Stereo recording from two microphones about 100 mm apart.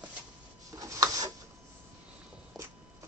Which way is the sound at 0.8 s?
35° right (ahead or behind).